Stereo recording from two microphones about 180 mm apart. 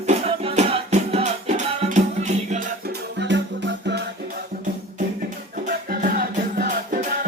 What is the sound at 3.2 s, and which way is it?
Music, 75° right (ahead or behind).